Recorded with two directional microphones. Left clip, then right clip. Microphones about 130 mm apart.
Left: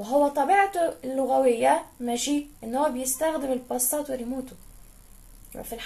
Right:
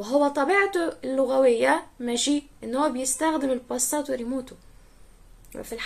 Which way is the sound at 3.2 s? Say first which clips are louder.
Right 2 dB; 40° right (ahead or behind).